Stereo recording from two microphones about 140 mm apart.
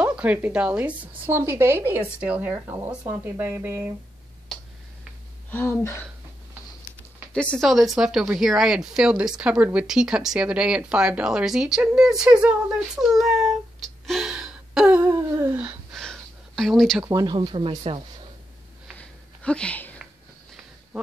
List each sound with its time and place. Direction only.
0.0 s speech: 10° right (ahead or behind)
5.5 s speech: 15° left (ahead or behind)
7.3 s speech: 5° left (ahead or behind)
15.0 s speech: 20° right (ahead or behind)
15.9 s a sound: 5° left (ahead or behind)
17.0 s speech: 25° right (ahead or behind)
18.9 s a sound: 10° left (ahead or behind)